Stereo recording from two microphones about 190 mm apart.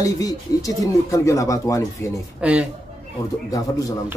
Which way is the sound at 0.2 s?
20° left (ahead or behind).